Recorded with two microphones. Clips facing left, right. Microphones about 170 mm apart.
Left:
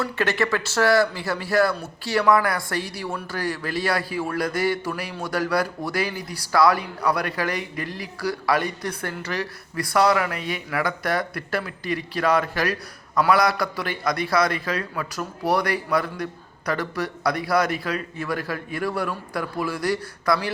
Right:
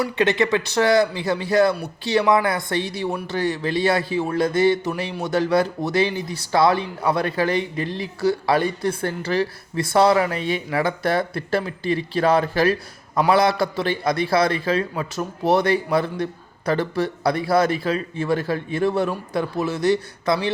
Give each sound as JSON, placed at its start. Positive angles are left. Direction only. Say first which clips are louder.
{"t": 0.0, "sound": "a man's voice", "louder": "right 4 dB", "side_deg": -20}